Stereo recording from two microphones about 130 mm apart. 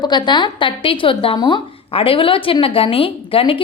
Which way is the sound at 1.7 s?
45° left (ahead or behind).